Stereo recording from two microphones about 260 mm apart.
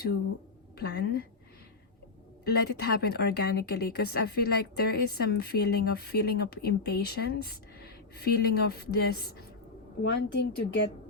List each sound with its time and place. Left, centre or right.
0.8 s speech: left
2.4 s speech: left